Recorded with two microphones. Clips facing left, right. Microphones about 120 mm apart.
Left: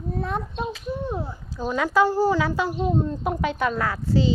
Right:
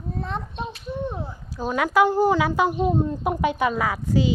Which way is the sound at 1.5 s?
10° right (ahead or behind).